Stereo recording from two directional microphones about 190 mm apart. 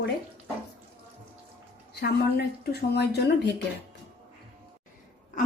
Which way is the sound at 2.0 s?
60° left (ahead or behind).